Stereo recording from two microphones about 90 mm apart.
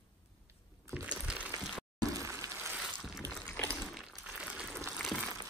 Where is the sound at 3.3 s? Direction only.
10° left (ahead or behind).